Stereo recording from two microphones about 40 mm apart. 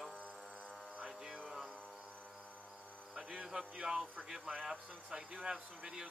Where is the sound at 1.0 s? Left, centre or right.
Centre.